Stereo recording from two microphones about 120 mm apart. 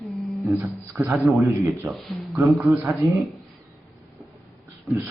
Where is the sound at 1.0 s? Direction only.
25° right (ahead or behind).